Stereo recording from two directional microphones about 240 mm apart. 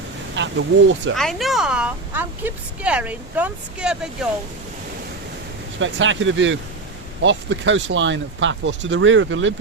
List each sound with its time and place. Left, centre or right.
0.3 s speech: right
1.1 s a woman's voice: centre
5.8 s speech: right